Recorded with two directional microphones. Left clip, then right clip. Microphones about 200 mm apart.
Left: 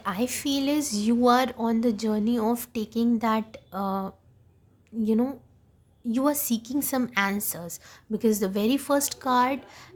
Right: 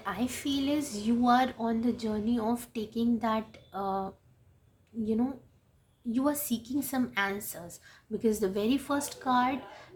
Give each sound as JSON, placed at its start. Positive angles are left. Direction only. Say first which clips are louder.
{"t": 0.0, "sound": "a woman's voice", "louder": "left 5 dB", "side_deg": 55}